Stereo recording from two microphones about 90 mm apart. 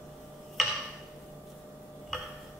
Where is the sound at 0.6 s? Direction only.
5° left (ahead or behind).